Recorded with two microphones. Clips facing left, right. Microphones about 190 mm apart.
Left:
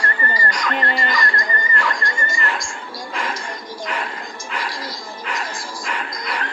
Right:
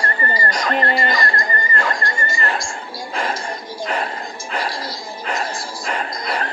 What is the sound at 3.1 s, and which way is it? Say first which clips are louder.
Music: right 3 dB; 30° right (ahead or behind).